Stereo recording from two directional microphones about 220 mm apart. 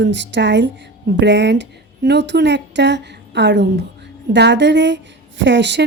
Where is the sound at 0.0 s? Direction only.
55° right (ahead or behind).